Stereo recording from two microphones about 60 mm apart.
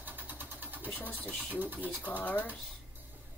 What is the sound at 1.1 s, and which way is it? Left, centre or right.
Speech, left.